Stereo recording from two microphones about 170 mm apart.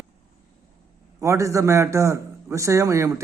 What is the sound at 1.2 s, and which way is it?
A man's voice, 20° right (ahead or behind).